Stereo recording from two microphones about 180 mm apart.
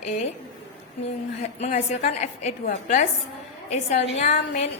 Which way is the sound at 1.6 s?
40° left (ahead or behind).